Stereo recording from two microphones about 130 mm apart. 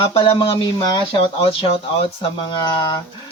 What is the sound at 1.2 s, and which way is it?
Speech, 45° left (ahead or behind).